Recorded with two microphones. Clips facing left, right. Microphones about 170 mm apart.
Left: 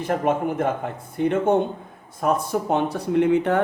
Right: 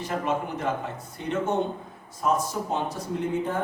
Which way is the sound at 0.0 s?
55° left (ahead or behind).